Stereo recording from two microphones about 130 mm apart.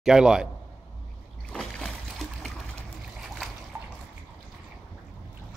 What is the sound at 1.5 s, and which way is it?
Boat, centre (ahead or behind).